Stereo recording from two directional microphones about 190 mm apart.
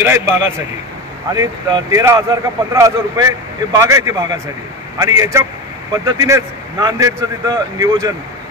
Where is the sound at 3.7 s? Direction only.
15° right (ahead or behind).